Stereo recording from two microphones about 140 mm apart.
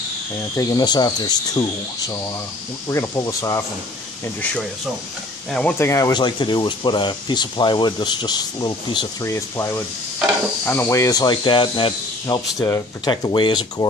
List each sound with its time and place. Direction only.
0.6 s speech: 25° left (ahead or behind)
2.9 s speech: 20° left (ahead or behind)
5.5 s speech: 10° left (ahead or behind)
5.8 s speech: 20° left (ahead or behind)
9.3 s speech: 20° left (ahead or behind)